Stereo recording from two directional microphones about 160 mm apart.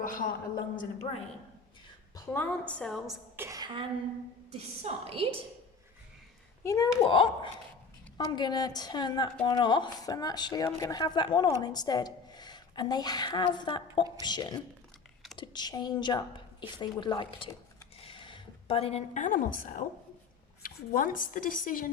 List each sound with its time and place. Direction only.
0.0 s speech: 55° left (ahead or behind)
2.1 s a woman's voice: 10° left (ahead or behind)
3.3 s speech: 15° right (ahead or behind)
3.6 s a woman's voice: 30° right (ahead or behind)
6.6 s speech: 20° left (ahead or behind)
7.0 s a woman's voice: 30° left (ahead or behind); by 21.8 s 60° left (ahead or behind)